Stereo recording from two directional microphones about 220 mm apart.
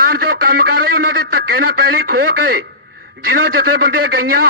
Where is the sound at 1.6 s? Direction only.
45° right (ahead or behind).